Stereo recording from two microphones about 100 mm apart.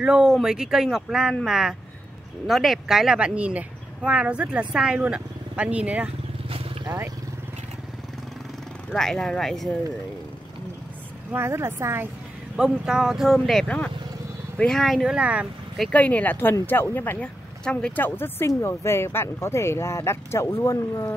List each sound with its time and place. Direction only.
0.0 s speech: 5° right (ahead or behind)
6.5 s vehicle: 70° right (ahead or behind)
8.9 s speech: 5° left (ahead or behind)
11.3 s speech: 25° right (ahead or behind)
12.5 s speech: 5° right (ahead or behind)
13.7 s speech: 15° left (ahead or behind); by 15.4 s 10° right (ahead or behind)
15.9 s speech: 15° left (ahead or behind)
17.6 s speech: 10° left (ahead or behind)
18.0 s speech: 20° left (ahead or behind)